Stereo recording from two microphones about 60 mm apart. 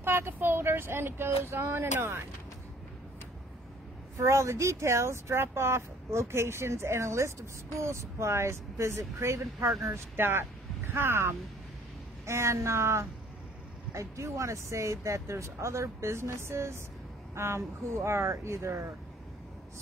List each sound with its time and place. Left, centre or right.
0.0 s speech: right
4.2 s speech: right
10.1 s speech: right